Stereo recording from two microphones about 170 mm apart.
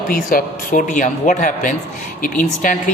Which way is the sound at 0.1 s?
55° left (ahead or behind).